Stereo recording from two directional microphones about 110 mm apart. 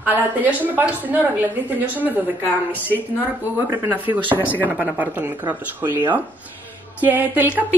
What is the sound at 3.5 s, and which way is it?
Speech, 20° right (ahead or behind).